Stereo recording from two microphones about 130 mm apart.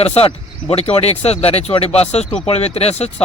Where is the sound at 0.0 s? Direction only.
50° left (ahead or behind).